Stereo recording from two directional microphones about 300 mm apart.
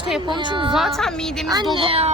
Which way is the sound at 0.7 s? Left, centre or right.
Centre.